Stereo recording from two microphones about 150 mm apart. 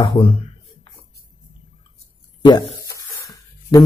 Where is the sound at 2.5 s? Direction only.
25° left (ahead or behind).